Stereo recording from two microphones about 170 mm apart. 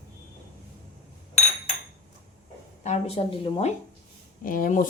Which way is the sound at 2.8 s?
35° left (ahead or behind).